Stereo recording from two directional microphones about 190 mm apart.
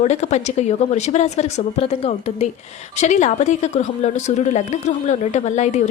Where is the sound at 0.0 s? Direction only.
35° left (ahead or behind).